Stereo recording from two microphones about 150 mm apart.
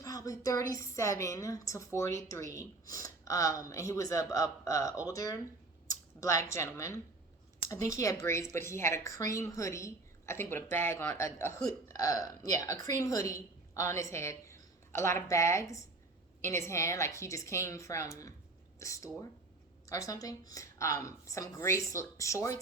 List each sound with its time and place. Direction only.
0.0 s speech: 25° left (ahead or behind)